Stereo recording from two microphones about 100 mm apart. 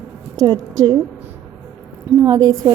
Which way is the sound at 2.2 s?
40° right (ahead or behind).